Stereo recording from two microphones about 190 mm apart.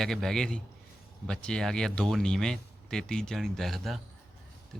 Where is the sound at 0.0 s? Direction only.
Centre (ahead or behind).